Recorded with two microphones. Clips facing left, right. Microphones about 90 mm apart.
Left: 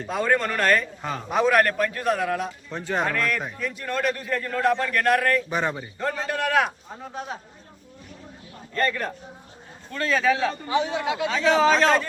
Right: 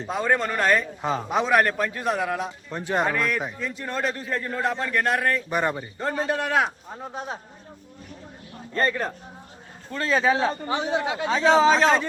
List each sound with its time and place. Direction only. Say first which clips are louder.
0.0 s a man's voice: even; 20° right (ahead or behind)
5.5 s speech: right 1 dB; centre (ahead or behind)
5.8 s a man's voice: right 1 dB; 25° right (ahead or behind)
8.7 s a man's voice: right 1 dB; 25° right (ahead or behind)